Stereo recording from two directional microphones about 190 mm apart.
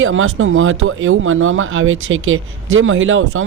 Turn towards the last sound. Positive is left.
turn(degrees=-90)